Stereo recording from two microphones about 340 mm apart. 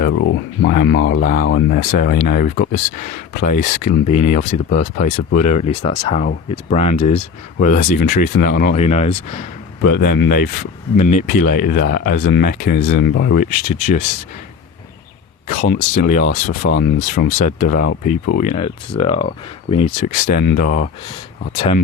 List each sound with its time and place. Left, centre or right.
0.2 s speech: left
15.6 s speech: left